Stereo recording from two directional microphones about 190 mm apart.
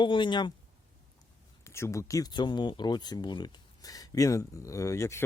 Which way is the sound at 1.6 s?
15° left (ahead or behind).